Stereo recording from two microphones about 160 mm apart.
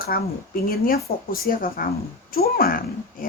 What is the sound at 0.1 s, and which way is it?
A woman's voice, 65° left (ahead or behind).